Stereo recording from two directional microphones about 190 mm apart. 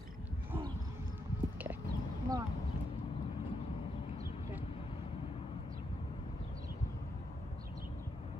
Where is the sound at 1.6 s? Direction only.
15° right (ahead or behind).